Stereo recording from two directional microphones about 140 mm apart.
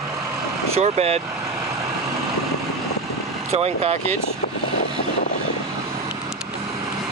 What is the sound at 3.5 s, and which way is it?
Speech, 45° right (ahead or behind).